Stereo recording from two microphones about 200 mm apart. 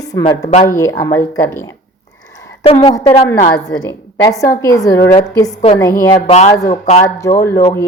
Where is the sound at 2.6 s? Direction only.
25° left (ahead or behind).